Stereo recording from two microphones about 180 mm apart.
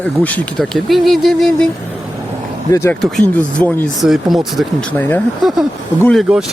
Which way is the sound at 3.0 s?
5° left (ahead or behind).